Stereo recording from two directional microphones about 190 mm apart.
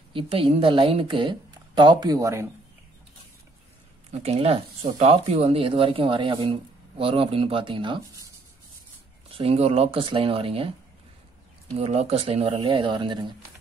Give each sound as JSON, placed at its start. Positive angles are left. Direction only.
{"t": 0.1, "sound": "speech", "side_deg": -30}
{"t": 4.1, "sound": "speech", "side_deg": -35}
{"t": 9.3, "sound": "speech", "side_deg": -30}
{"t": 11.7, "sound": "speech", "side_deg": -35}